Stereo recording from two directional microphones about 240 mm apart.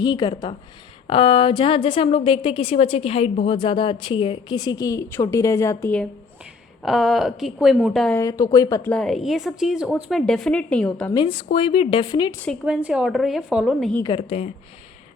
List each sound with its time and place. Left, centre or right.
0.0 s a woman's voice: centre
8.2 s a woman's voice: centre
11.1 s a woman's voice: centre
12.4 s a woman's voice: centre
14.0 s a woman's voice: left